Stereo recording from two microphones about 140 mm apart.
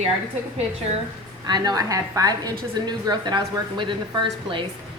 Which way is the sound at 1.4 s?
30° right (ahead or behind).